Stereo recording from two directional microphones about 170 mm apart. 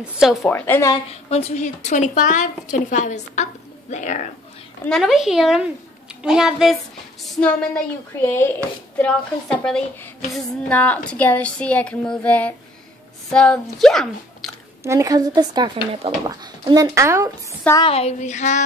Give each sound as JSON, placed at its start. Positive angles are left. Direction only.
{"t": 0.0, "sound": "a woman's voice", "side_deg": -5}
{"t": 0.4, "sound": "speech", "side_deg": 10}
{"t": 1.3, "sound": "a woman's voice", "side_deg": 40}
{"t": 4.8, "sound": "a woman's voice", "side_deg": 0}
{"t": 14.8, "sound": "speech", "side_deg": -15}
{"t": 17.5, "sound": "a woman's voice", "side_deg": 15}
{"t": 17.8, "sound": "a woman's voice", "side_deg": 35}